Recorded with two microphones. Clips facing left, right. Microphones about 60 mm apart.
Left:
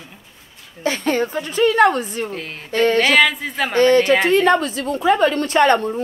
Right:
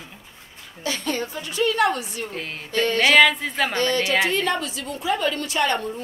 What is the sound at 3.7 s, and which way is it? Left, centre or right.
A woman's voice, left.